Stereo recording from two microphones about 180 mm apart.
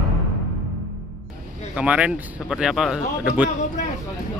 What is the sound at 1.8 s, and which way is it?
A man's voice, 5° right (ahead or behind).